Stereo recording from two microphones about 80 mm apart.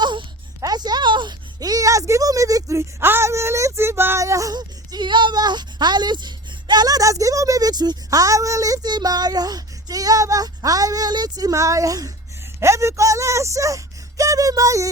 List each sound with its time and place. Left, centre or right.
0.0 s a sound: right
0.6 s a sound: right
1.5 s speech: right
4.5 s speech: right
7.7 s speech: right
8.9 s speech: right